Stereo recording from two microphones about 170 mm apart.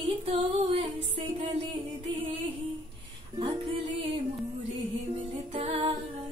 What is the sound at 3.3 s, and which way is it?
Music, 30° right (ahead or behind).